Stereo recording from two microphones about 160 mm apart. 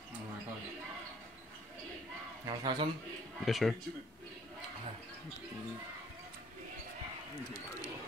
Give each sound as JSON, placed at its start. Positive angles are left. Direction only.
{"t": 2.4, "sound": "speech", "side_deg": -30}
{"t": 3.3, "sound": "speech", "side_deg": 0}